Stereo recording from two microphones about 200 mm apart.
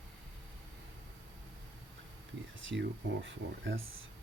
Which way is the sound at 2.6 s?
65° right (ahead or behind).